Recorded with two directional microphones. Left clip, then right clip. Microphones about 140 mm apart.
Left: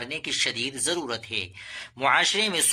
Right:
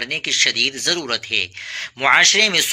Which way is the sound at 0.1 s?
15° right (ahead or behind).